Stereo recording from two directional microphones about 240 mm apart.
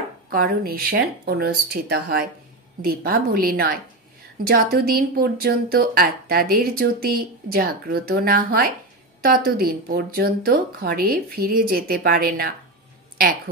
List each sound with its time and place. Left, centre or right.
0.3 s speech: right